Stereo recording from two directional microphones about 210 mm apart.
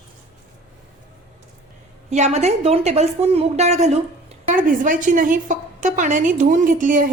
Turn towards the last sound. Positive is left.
turn(degrees=-40)  # may be behind; listen again after turning